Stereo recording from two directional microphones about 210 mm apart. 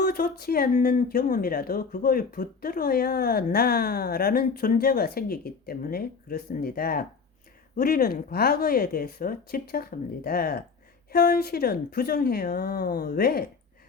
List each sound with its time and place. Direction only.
0.0 s speech: 45° left (ahead or behind)